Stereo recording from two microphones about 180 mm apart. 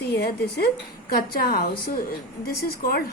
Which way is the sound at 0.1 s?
65° left (ahead or behind).